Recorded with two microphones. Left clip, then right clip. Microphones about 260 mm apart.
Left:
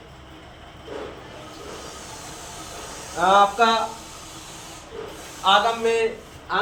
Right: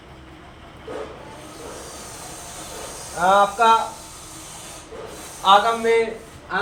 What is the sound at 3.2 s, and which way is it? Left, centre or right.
Speech, right.